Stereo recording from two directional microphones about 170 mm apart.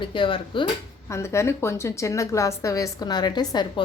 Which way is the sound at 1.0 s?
15° left (ahead or behind).